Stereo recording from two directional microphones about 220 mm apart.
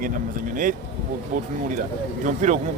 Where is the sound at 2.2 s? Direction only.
35° right (ahead or behind).